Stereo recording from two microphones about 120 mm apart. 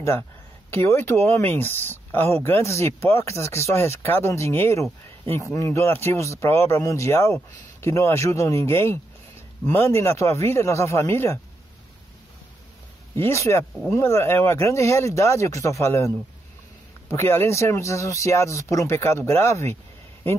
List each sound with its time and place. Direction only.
0.7 s speech: 20° left (ahead or behind)
13.1 s speech: 25° left (ahead or behind)